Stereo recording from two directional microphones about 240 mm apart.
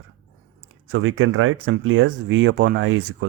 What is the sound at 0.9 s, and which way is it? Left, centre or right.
Speech, right.